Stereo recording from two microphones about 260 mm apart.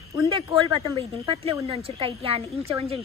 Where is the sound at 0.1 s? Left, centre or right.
Centre.